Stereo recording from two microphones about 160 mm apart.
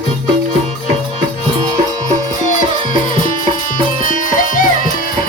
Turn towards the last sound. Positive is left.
turn(degrees=55)  # may be behind; listen again after turning